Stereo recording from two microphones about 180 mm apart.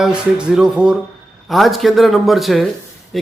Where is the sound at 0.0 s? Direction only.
5° right (ahead or behind).